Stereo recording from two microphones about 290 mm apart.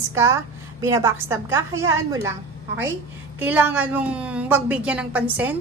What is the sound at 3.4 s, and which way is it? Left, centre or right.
A woman's voice, centre.